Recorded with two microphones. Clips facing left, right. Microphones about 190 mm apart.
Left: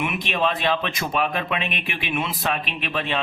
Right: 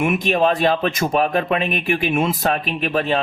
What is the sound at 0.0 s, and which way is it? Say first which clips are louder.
Speech: right 7 dB; 45° right (ahead or behind).